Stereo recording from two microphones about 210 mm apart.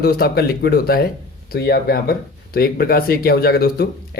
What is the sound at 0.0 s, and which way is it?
Speech, 45° left (ahead or behind).